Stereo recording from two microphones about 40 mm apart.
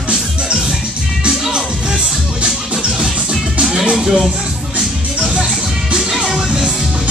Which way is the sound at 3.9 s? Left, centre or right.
Centre.